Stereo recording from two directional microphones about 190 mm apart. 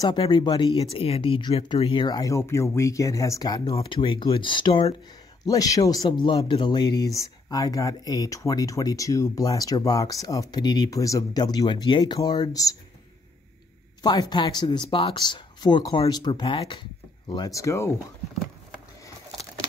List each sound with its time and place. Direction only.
0.0 s speech: 25° left (ahead or behind)
14.0 s speech: 20° left (ahead or behind)